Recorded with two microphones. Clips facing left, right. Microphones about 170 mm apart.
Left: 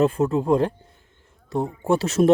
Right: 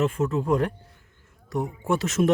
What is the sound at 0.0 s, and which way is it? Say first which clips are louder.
Speech: left 4 dB; 35° left (ahead or behind).